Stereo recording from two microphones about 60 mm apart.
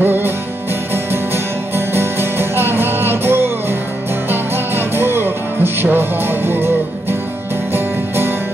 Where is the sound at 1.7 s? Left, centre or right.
Right.